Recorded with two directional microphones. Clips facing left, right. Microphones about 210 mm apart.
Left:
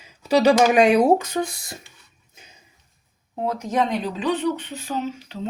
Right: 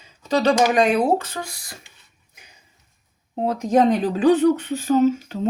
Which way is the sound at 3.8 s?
45° right (ahead or behind).